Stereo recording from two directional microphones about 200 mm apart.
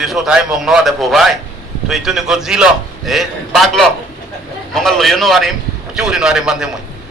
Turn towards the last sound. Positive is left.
turn(degrees=-5)  # may be behind; listen again after turning